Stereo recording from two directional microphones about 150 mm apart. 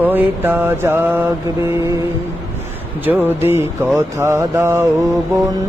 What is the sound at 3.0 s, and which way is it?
Music, 15° right (ahead or behind).